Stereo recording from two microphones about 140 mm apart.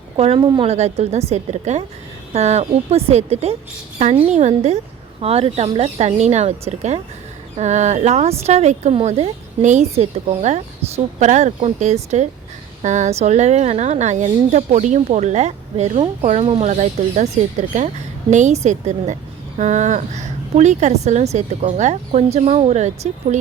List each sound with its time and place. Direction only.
0.2 s speech: 40° right (ahead or behind)
0.7 s a woman's voice: 50° right (ahead or behind)
16.6 s a woman's voice: 60° right (ahead or behind)